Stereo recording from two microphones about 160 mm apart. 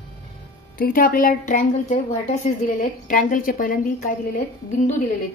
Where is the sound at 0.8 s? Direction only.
65° left (ahead or behind).